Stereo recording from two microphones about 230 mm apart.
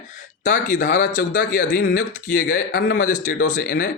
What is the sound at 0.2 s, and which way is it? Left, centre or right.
Speech, left.